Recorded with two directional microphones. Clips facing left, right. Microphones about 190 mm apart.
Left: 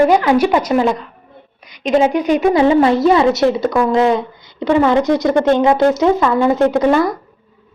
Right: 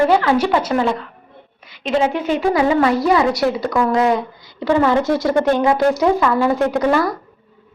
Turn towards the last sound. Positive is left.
turn(degrees=20)  # may be behind; listen again after turning